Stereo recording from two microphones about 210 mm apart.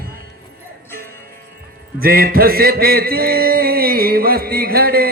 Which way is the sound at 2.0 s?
45° right (ahead or behind).